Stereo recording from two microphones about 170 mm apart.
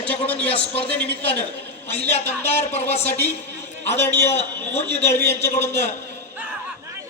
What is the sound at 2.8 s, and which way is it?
Speech, 40° left (ahead or behind).